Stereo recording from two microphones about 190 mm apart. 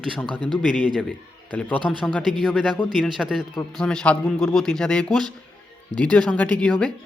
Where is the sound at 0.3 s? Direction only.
25° right (ahead or behind).